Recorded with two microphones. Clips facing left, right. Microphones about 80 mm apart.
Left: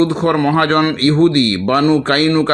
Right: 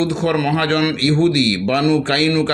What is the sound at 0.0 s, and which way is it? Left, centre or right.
Speech, left.